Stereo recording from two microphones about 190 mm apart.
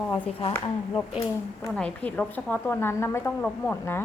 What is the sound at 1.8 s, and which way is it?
A woman's voice, 5° left (ahead or behind).